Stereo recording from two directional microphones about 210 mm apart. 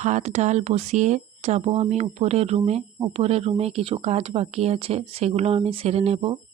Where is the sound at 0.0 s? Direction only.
35° right (ahead or behind).